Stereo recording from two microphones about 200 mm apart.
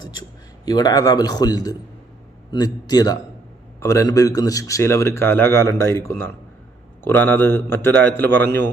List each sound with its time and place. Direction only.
0.0 s a man's voice: 20° left (ahead or behind)